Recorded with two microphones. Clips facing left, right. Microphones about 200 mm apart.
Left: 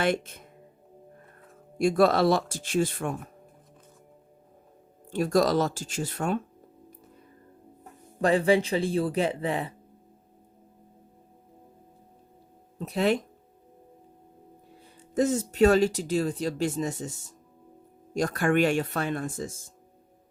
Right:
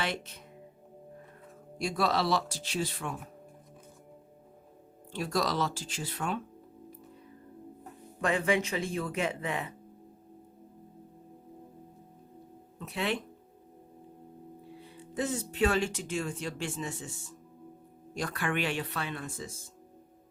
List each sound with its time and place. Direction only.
0.0 s speech: 50° left (ahead or behind)
1.8 s speech: 50° left (ahead or behind)
5.1 s speech: 45° left (ahead or behind)
8.2 s speech: 35° left (ahead or behind)
12.8 s speech: 40° left (ahead or behind)
14.8 s speech: 40° left (ahead or behind)